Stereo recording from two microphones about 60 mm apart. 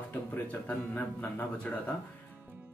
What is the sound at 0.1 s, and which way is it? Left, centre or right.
Speech, left.